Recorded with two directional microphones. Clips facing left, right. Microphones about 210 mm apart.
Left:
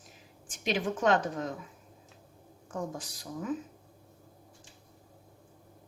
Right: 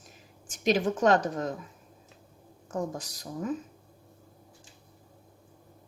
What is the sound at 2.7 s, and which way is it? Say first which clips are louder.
Speech: right 4 dB; 40° right (ahead or behind).